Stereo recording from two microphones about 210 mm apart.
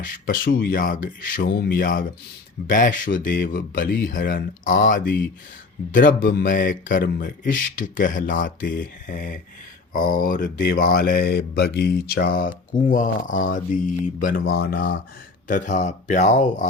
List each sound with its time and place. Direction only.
0.0 s speech: 40° left (ahead or behind)